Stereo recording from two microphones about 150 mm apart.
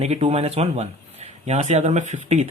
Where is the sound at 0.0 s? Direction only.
45° right (ahead or behind).